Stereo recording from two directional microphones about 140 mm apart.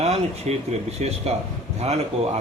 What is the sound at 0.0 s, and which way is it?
A man's voice, 50° right (ahead or behind).